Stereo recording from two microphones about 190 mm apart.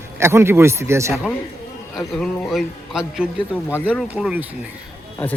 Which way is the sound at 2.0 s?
Centre (ahead or behind).